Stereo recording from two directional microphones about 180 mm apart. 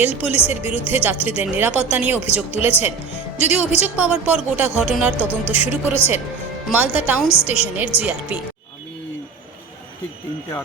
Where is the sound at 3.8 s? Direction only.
10° right (ahead or behind).